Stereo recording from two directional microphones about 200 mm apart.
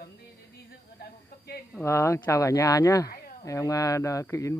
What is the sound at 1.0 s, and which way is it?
Snake, 50° left (ahead or behind).